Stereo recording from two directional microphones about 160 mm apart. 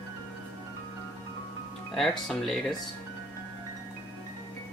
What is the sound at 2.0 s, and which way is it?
Speech, centre (ahead or behind).